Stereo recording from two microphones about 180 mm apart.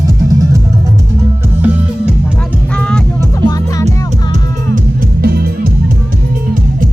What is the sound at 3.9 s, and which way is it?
Music, 40° right (ahead or behind).